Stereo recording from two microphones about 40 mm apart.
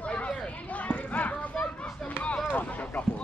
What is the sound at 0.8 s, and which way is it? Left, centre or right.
Clip-clop, left.